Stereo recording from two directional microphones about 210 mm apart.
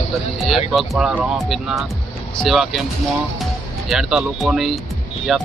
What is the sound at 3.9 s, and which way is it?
Speech, centre (ahead or behind).